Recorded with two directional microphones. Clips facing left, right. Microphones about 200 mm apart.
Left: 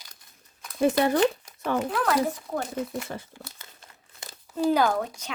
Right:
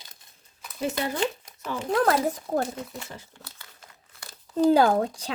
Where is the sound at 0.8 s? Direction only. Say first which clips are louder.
Left 7 dB; 55° left (ahead or behind).